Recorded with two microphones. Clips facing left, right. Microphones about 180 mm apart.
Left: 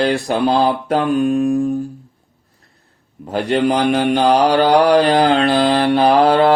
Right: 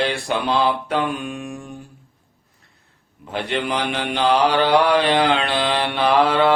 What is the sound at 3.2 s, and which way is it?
Mantra, 40° left (ahead or behind).